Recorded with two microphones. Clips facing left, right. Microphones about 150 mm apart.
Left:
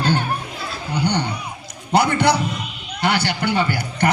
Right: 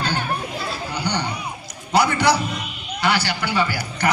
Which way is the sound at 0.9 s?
55° left (ahead or behind).